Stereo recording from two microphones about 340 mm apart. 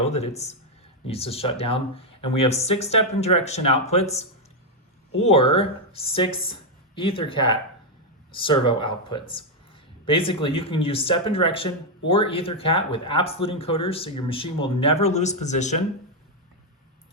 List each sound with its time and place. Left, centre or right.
0.2 s speech: centre